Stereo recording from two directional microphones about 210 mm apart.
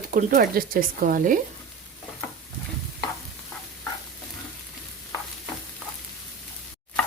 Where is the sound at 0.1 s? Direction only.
45° right (ahead or behind).